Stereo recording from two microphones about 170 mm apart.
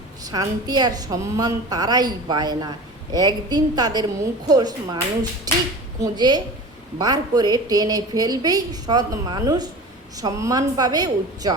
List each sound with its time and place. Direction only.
0.3 s a woman's voice: 25° right (ahead or behind)